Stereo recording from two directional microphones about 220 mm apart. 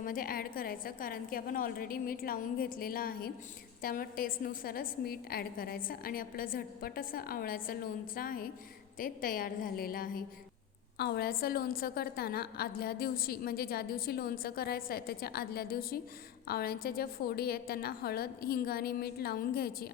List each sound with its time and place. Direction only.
0.0 s a woman's voice: 40° left (ahead or behind)